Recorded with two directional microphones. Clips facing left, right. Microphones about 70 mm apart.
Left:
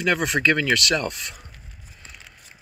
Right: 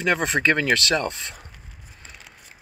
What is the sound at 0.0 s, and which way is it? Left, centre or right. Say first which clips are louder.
Speech: even; right.